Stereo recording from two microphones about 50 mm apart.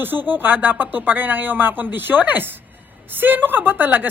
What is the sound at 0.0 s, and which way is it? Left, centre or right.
Speech, right.